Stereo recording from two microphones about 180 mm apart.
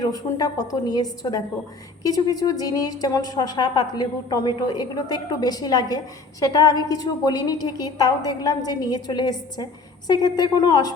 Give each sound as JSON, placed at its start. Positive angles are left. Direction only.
{"t": 0.0, "sound": "a woman's voice", "side_deg": 20}